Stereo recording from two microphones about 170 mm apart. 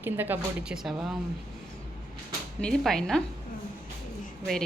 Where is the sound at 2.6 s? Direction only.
5° left (ahead or behind).